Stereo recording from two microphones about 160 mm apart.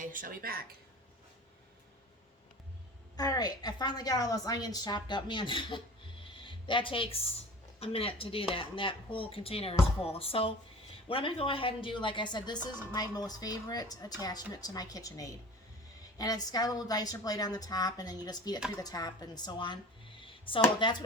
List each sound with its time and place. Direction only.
0.0 s a woman's voice: 55° right (ahead or behind)
3.2 s a woman's voice: 25° left (ahead or behind)